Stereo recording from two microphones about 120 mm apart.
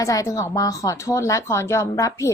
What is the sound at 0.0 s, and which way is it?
A woman's voice, 25° left (ahead or behind).